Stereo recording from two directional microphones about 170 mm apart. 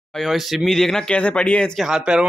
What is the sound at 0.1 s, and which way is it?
Speech, centre (ahead or behind).